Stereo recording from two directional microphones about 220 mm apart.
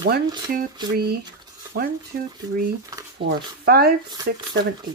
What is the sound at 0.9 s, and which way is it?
Speech, 45° right (ahead or behind).